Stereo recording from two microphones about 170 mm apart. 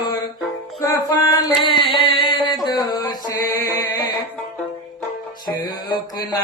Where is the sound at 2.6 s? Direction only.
25° left (ahead or behind).